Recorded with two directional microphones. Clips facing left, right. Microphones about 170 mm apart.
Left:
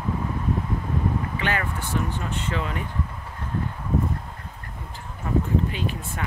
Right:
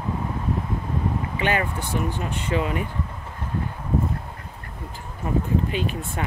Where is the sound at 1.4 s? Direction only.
15° right (ahead or behind).